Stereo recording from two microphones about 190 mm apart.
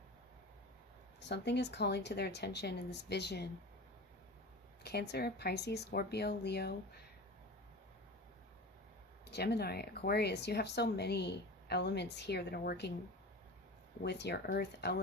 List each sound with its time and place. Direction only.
1.3 s speech: 65° left (ahead or behind)
4.8 s speech: 60° left (ahead or behind)
9.2 s speech: 60° left (ahead or behind)
14.0 s speech: 60° left (ahead or behind)